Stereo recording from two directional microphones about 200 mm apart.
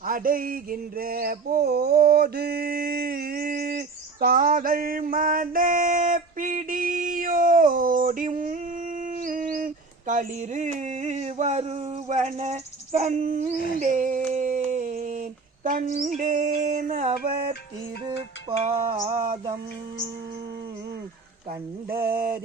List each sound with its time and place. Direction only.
0.0 s a sound: 45° right (ahead or behind)
16.0 s music: 40° right (ahead or behind)
18.4 s mantra: 20° right (ahead or behind)
21.8 s mantra: 50° right (ahead or behind)